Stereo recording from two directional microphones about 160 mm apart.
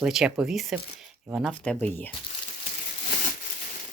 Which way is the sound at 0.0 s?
5° right (ahead or behind).